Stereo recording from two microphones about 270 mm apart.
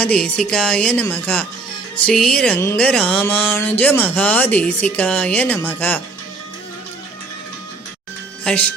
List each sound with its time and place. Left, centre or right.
0.0 s music: centre
8.4 s music: centre